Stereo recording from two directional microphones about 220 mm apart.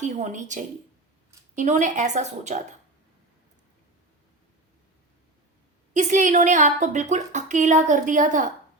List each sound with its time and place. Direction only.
0.0 s a woman's voice: 35° right (ahead or behind)
5.9 s a woman's voice: 35° right (ahead or behind)